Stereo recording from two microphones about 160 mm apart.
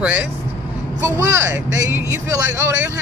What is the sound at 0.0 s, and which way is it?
Speech, 10° right (ahead or behind).